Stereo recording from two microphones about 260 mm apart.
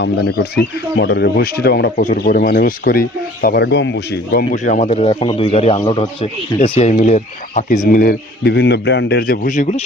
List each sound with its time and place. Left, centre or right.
0.0 s speech: left